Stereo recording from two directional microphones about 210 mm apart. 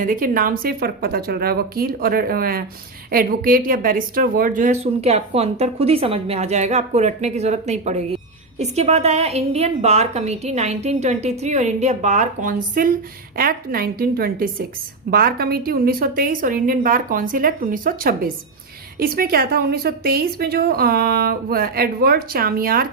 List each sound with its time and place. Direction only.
0.0 s a woman's voice: 40° right (ahead or behind)